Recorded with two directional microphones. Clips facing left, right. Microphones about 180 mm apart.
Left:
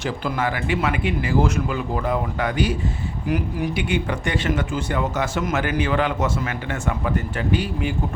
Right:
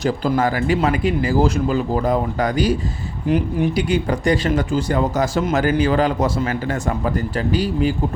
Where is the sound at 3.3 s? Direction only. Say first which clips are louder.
Right 5 dB; 30° right (ahead or behind).